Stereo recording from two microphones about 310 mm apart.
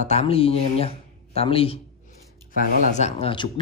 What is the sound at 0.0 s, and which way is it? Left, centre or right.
Speech, left.